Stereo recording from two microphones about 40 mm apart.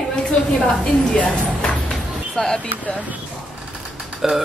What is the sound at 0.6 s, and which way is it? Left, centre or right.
A woman's voice, left.